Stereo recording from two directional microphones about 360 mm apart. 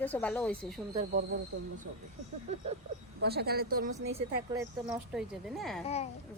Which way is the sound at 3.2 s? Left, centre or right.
Right.